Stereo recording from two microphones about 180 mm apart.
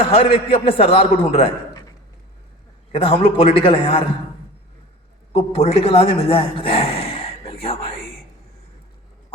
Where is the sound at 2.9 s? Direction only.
30° left (ahead or behind).